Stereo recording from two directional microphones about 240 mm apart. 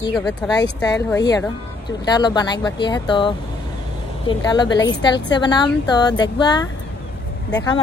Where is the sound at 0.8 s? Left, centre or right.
Centre.